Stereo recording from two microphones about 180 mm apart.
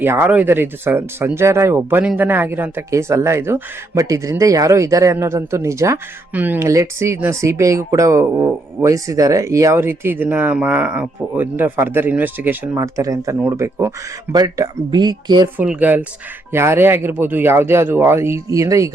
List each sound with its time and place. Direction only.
0.0 s speech: 10° right (ahead or behind)
15.5 s speech: 10° right (ahead or behind)